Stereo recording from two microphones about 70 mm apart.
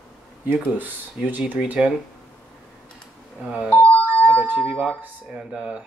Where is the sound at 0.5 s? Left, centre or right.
Right.